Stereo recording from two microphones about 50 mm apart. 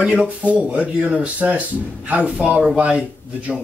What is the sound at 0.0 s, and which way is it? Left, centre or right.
Speech, centre.